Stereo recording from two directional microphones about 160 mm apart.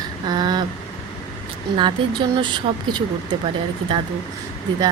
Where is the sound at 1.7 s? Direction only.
30° right (ahead or behind).